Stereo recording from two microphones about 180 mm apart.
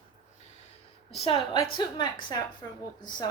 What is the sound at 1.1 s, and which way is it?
A woman's voice, 30° left (ahead or behind).